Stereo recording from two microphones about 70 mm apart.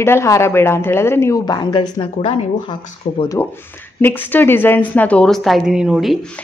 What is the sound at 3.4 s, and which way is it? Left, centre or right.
A woman's voice, left.